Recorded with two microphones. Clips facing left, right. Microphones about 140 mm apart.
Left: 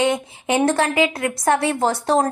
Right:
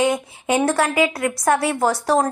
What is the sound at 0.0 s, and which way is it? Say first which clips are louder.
A woman's voice: even; 25° left (ahead or behind).